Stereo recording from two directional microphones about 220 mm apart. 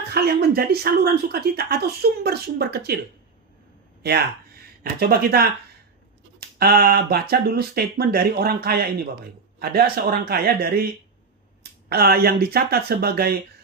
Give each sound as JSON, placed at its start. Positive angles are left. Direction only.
{"t": 0.1, "sound": "speech", "side_deg": -45}
{"t": 4.0, "sound": "speech", "side_deg": -45}
{"t": 6.6, "sound": "speech", "side_deg": -45}
{"t": 11.9, "sound": "speech", "side_deg": -45}